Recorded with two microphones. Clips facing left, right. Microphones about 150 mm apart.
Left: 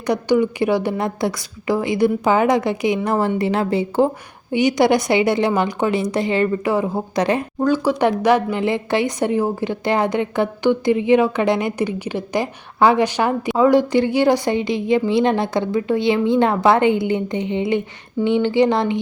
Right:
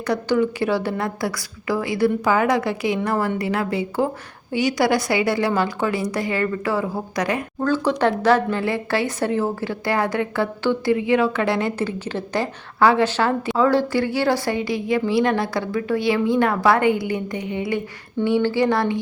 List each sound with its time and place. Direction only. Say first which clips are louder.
0.0 s speech: left 3 dB; 15° left (ahead or behind)
7.6 s speech: left 2 dB; 10° left (ahead or behind)